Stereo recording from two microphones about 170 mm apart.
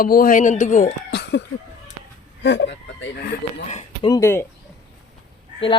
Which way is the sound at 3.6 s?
40° left (ahead or behind).